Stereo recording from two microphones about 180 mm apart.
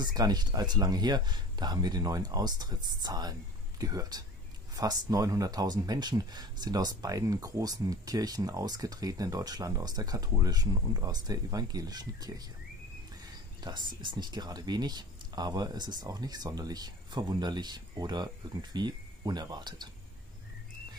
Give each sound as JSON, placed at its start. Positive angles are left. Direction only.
{"t": 0.0, "sound": "speech", "side_deg": -20}
{"t": 13.6, "sound": "speech", "side_deg": -25}